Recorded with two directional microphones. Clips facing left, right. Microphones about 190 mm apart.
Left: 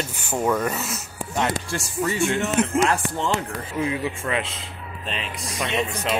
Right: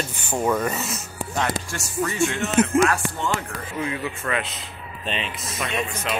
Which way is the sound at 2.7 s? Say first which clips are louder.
Right 1 dB; 30° left (ahead or behind).